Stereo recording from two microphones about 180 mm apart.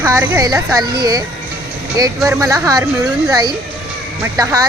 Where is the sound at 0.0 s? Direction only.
15° right (ahead or behind).